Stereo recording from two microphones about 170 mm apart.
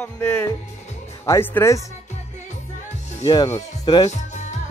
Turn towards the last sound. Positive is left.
turn(degrees=45)  # may be behind; listen again after turning